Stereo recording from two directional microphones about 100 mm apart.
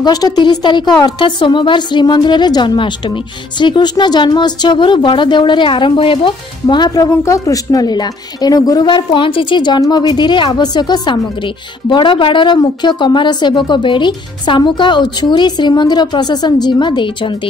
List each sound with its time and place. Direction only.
0.0 s speech: 40° left (ahead or behind)